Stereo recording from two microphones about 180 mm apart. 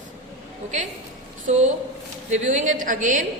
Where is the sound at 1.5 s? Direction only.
40° right (ahead or behind).